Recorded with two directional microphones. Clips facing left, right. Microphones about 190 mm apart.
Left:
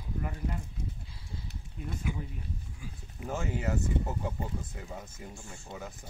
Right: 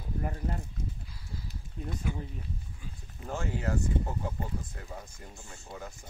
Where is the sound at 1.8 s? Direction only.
35° right (ahead or behind).